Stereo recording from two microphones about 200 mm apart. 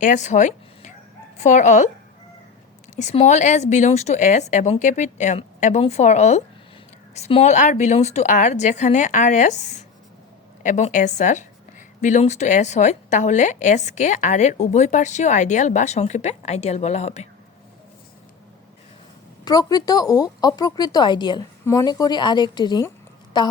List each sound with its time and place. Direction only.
0.0 s a woman's voice: 35° left (ahead or behind)
2.9 s a woman's voice: 35° left (ahead or behind)
19.5 s a woman's voice: 20° left (ahead or behind)